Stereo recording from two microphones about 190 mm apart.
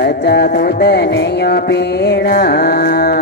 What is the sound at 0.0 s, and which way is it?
Music, 55° left (ahead or behind).